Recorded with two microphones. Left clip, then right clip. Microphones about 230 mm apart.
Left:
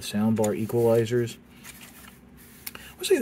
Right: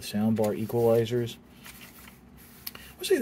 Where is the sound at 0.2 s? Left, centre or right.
Centre.